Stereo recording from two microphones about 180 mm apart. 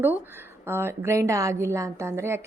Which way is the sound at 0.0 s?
10° right (ahead or behind).